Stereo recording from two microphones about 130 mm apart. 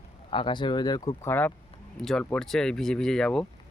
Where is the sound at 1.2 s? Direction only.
20° left (ahead or behind).